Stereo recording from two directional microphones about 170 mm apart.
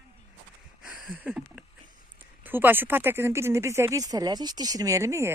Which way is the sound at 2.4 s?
10° right (ahead or behind).